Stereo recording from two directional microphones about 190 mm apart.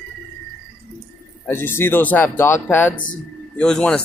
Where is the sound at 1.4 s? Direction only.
10° left (ahead or behind).